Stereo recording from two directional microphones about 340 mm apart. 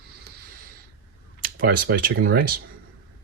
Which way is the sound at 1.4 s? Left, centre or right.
Right.